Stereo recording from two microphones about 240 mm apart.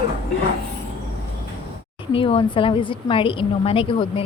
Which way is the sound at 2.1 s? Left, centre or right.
Left.